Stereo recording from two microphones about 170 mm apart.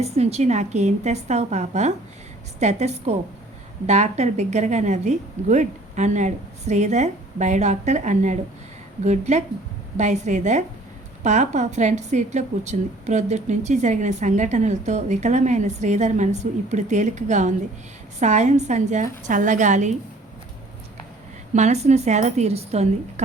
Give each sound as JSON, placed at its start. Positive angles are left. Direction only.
{"t": 0.0, "sound": "a woman's voice", "side_deg": -40}
{"t": 21.5, "sound": "a woman's voice", "side_deg": -40}